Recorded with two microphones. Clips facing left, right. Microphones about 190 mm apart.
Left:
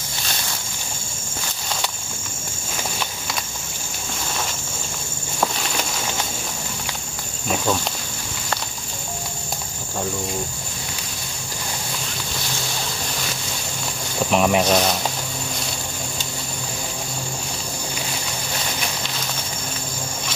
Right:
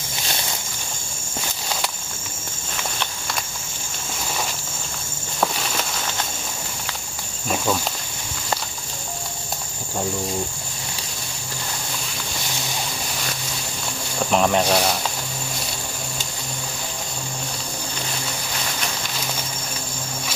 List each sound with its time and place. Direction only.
5.4 s walk: centre (ahead or behind)
7.4 s cricket: centre (ahead or behind)
14.3 s speech: 5° left (ahead or behind)
14.7 s speech: 5° right (ahead or behind)